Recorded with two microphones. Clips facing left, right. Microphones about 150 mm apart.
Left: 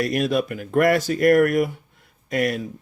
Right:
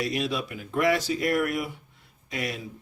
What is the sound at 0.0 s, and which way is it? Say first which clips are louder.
Speech: left 7 dB; 50° left (ahead or behind).